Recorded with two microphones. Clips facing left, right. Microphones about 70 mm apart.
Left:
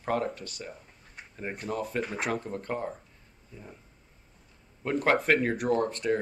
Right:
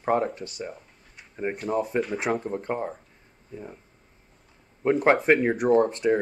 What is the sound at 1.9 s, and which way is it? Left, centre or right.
Speech, right.